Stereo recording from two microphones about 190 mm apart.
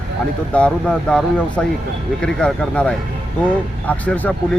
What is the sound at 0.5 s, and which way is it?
Speech, 5° left (ahead or behind).